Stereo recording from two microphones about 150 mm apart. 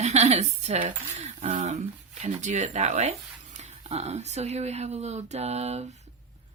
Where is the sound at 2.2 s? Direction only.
50° right (ahead or behind).